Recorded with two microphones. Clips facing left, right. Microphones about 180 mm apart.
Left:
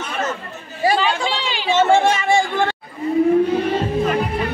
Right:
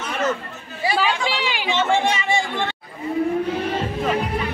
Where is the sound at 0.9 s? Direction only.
10° right (ahead or behind).